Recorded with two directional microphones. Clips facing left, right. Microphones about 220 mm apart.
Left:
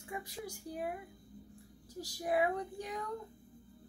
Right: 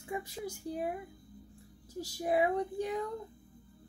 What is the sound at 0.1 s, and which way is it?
Speech, 25° right (ahead or behind).